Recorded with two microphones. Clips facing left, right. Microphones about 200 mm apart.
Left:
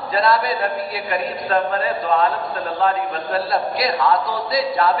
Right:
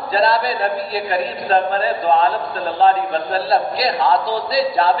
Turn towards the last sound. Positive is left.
turn(degrees=-30)  # may be behind; listen again after turning